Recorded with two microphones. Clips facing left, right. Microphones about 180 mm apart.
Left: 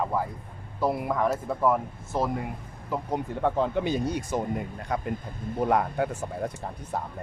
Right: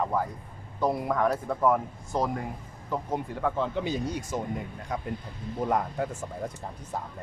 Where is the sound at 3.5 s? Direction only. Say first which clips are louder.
Left 3 dB; 50° left (ahead or behind).